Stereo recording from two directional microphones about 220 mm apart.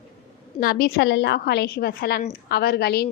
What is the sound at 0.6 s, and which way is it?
A woman's voice, 40° left (ahead or behind).